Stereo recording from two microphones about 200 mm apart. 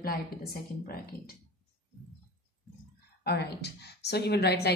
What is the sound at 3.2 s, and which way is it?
A woman's voice, 55° left (ahead or behind).